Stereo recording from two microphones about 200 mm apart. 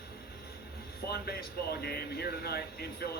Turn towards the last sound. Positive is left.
turn(degrees=50)  # may be behind; listen again after turning